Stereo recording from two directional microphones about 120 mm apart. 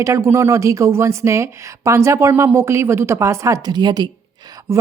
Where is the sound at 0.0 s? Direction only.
25° right (ahead or behind).